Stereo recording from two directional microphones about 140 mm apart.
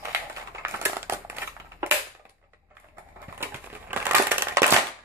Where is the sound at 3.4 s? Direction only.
15° right (ahead or behind).